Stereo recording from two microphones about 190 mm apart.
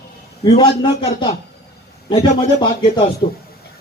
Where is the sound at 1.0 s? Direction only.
30° left (ahead or behind).